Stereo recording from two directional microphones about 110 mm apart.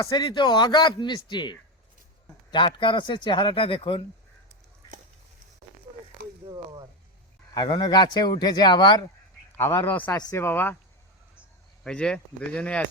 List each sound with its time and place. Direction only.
0.0 s speech: 40° left (ahead or behind)
7.8 s speech: 45° left (ahead or behind)
9.5 s a man's voice: 25° left (ahead or behind)
11.8 s speech: 5° left (ahead or behind)